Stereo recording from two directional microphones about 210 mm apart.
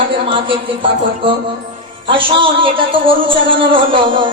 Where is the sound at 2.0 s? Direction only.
25° right (ahead or behind).